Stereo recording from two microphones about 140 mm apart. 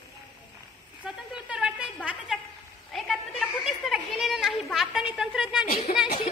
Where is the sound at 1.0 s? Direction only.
5° right (ahead or behind).